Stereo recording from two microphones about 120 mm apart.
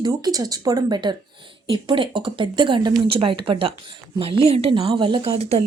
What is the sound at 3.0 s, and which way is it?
A woman's voice, 50° right (ahead or behind).